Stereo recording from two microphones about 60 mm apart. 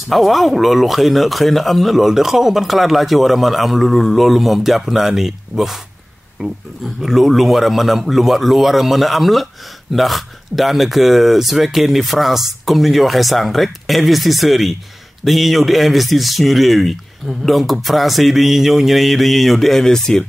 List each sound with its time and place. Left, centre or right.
0.1 s speech: centre
6.4 s speech: right
7.0 s speech: centre